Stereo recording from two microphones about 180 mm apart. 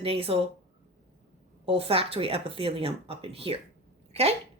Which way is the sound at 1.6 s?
30° right (ahead or behind).